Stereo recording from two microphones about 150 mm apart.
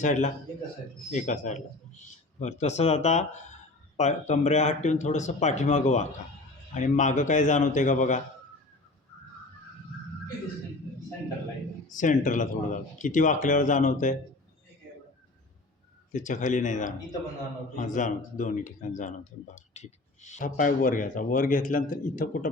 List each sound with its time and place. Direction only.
0.0 s speech: 55° left (ahead or behind)
11.9 s speech: 60° left (ahead or behind)
16.1 s speech: 55° left (ahead or behind)